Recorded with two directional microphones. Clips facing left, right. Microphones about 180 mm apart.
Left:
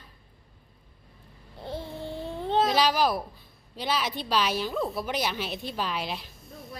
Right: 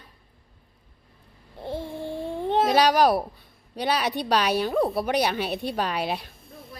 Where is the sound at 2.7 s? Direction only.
60° right (ahead or behind).